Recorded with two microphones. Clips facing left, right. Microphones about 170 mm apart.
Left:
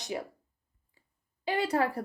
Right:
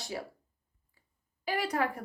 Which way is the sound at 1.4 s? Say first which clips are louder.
Left 3 dB; 25° left (ahead or behind).